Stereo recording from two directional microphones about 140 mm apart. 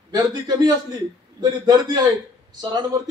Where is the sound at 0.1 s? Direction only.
30° right (ahead or behind).